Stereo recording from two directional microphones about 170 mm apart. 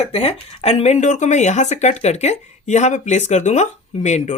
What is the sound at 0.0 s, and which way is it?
Speech, 35° left (ahead or behind).